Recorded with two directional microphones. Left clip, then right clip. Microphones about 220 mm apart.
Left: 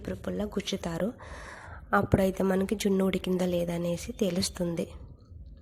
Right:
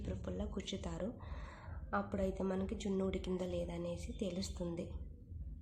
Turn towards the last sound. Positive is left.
turn(degrees=35)  # may be behind; listen again after turning